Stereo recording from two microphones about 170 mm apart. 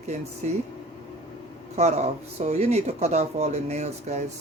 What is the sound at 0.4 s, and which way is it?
Speech, 45° right (ahead or behind).